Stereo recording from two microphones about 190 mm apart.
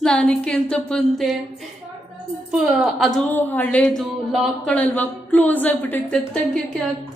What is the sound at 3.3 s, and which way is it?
A man's voice, 10° left (ahead or behind).